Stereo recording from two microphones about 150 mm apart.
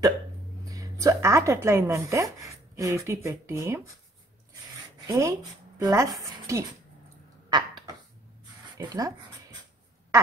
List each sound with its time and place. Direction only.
0.7 s speech: 20° right (ahead or behind)
5.0 s speech: 20° right (ahead or behind)
7.4 s a sound: 30° right (ahead or behind)
8.7 s speech: 25° right (ahead or behind)